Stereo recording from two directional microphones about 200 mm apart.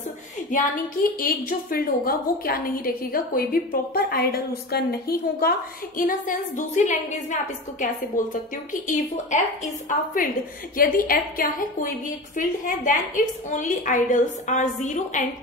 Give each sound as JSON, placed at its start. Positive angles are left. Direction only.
{"t": 1.2, "sound": "a woman's voice", "side_deg": 45}